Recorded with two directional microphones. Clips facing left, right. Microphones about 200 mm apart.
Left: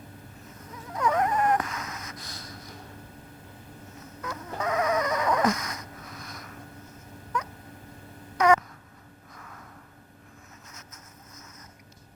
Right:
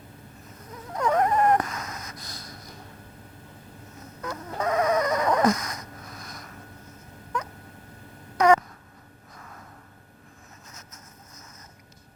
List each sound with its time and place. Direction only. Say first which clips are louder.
0.9 s a sound: right 3 dB; 40° right (ahead or behind)
4.2 s chicken: right 3 dB; 40° right (ahead or behind)
8.4 s babbling: right 2 dB; 40° right (ahead or behind)